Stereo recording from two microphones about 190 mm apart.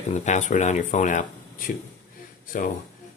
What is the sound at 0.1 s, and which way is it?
Speech, 40° left (ahead or behind).